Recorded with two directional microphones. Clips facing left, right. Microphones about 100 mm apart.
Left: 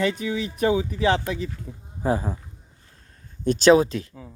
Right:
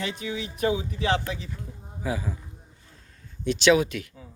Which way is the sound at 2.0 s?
40° left (ahead or behind).